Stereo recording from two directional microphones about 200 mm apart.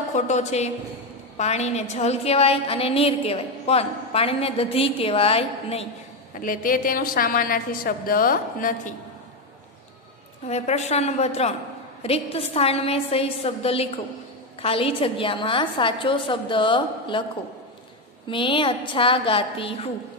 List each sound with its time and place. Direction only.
0.1 s a woman's voice: 35° left (ahead or behind)
6.4 s a woman's voice: 45° left (ahead or behind)
10.4 s a woman's voice: 35° left (ahead or behind)
18.3 s a woman's voice: 25° left (ahead or behind)